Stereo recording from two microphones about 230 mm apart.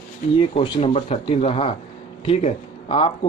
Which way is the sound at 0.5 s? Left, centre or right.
Left.